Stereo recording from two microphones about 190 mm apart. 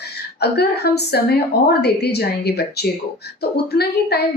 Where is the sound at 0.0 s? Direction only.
60° left (ahead or behind).